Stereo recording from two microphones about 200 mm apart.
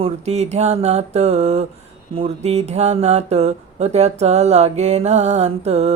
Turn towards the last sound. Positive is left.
turn(degrees=-35)  # may be behind; listen again after turning